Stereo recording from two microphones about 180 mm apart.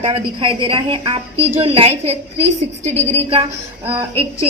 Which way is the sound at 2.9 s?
10° left (ahead or behind).